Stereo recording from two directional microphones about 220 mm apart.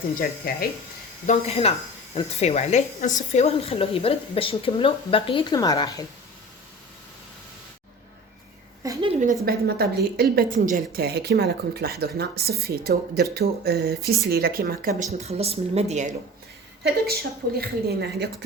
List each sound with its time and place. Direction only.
0.2 s speech: 40° left (ahead or behind)
1.3 s a woman's voice: 30° left (ahead or behind)
8.8 s a sound: 20° right (ahead or behind)
9.2 s a woman's voice: 45° right (ahead or behind)
16.8 s a woman's voice: 45° right (ahead or behind)